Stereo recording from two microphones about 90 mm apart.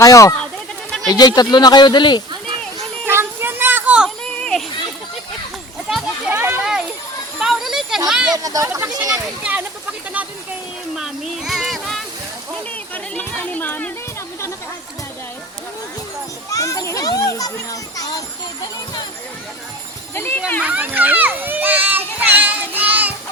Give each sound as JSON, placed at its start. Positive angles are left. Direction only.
{"t": 0.0, "sound": "speech", "side_deg": 40}
{"t": 3.1, "sound": "a sound", "side_deg": -25}
{"t": 5.9, "sound": "children playing", "side_deg": -5}
{"t": 6.3, "sound": "children playing", "side_deg": -25}
{"t": 6.6, "sound": "children playing", "side_deg": -5}
{"t": 8.3, "sound": "speech", "side_deg": -40}
{"t": 9.1, "sound": "speech", "side_deg": -15}
{"t": 10.9, "sound": "a sound", "side_deg": -5}
{"t": 12.9, "sound": "a sound", "side_deg": 15}
{"t": 16.5, "sound": "children playing", "side_deg": 40}
{"t": 20.1, "sound": "speech", "side_deg": 25}
{"t": 20.6, "sound": "a child's voice", "side_deg": -15}